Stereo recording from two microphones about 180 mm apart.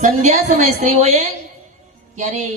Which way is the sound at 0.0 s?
40° right (ahead or behind).